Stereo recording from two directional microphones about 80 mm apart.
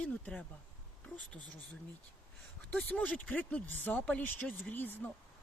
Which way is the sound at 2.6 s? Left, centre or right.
Centre.